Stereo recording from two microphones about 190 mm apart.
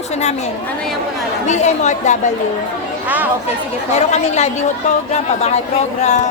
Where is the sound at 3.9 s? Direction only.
35° left (ahead or behind).